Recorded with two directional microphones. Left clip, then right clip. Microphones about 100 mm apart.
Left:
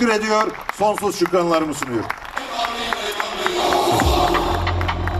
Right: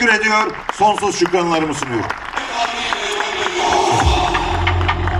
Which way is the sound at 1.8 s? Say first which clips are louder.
Right 3 dB; 25° right (ahead or behind).